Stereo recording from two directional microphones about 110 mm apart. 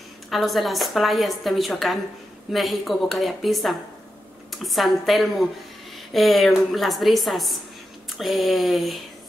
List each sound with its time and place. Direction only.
0.3 s a woman's voice: centre (ahead or behind)